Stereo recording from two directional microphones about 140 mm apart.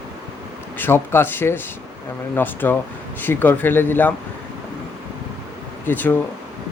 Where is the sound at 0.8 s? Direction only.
15° left (ahead or behind).